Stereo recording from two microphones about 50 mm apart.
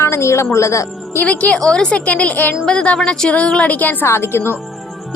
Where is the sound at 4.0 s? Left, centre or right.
Left.